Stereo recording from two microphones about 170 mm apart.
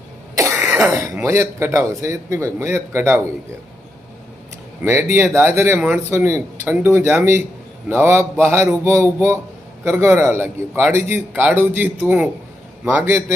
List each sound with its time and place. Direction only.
0.3 s speech: 15° right (ahead or behind)
4.8 s speech: 15° right (ahead or behind)